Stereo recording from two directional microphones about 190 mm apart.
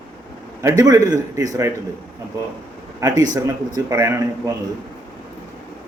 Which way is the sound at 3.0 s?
20° right (ahead or behind).